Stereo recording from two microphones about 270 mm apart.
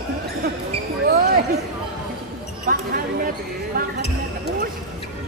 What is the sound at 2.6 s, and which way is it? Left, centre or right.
A man's voice, right.